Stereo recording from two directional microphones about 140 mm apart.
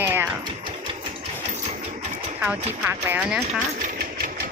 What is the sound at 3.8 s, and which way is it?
Sewing machine, 70° right (ahead or behind).